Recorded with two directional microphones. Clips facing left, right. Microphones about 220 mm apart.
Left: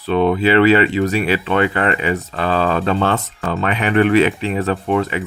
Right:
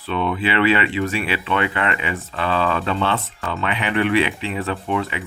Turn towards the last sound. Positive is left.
turn(degrees=45)  # may be behind; listen again after turning